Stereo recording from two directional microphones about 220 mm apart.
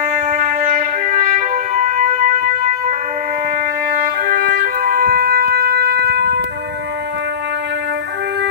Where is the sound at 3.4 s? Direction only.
45° right (ahead or behind).